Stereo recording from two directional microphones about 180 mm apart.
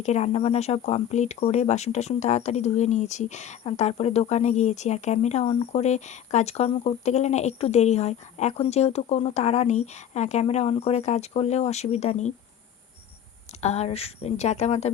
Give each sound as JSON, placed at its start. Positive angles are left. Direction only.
{"t": 0.0, "sound": "speech", "side_deg": 40}
{"t": 13.6, "sound": "speech", "side_deg": 35}